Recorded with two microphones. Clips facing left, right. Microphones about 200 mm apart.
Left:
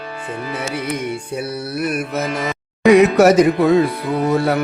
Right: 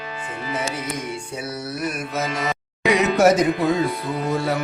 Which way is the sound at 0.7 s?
60° left (ahead or behind).